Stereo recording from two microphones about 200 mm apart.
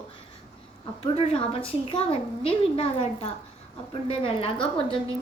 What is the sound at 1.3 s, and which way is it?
A woman's voice, 25° left (ahead or behind).